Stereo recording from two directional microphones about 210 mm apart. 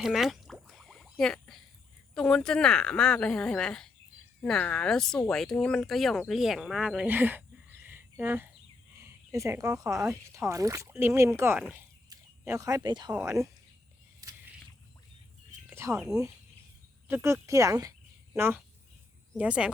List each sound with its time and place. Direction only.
0.0 s a sound: centre (ahead or behind)
2.1 s speech: 5° left (ahead or behind)
11.7 s a sound: 15° right (ahead or behind)
13.1 s speech: 15° right (ahead or behind)
15.7 s speech: 15° right (ahead or behind)
17.1 s speech: 5° right (ahead or behind)